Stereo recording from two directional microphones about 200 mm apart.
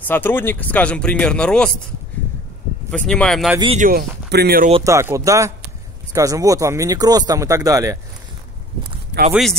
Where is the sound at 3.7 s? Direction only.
45° right (ahead or behind).